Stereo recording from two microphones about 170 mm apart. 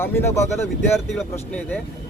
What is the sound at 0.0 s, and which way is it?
Speech, 15° left (ahead or behind).